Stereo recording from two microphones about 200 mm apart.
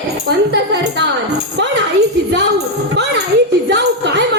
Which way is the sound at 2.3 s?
55° right (ahead or behind).